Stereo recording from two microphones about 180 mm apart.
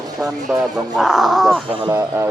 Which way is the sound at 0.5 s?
10° right (ahead or behind).